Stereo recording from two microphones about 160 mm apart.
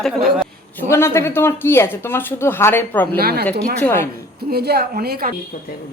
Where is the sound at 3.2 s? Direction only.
75° right (ahead or behind).